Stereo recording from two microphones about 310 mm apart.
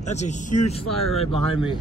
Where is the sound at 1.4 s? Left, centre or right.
Right.